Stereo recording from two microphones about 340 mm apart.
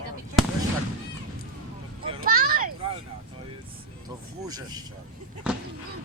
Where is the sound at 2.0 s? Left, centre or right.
Right.